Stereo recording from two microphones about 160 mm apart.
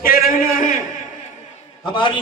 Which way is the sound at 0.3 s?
60° left (ahead or behind).